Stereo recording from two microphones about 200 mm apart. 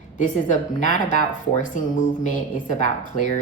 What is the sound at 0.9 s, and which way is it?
Speech, 40° left (ahead or behind).